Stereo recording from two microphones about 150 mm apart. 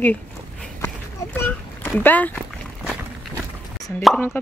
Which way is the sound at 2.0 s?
10° left (ahead or behind).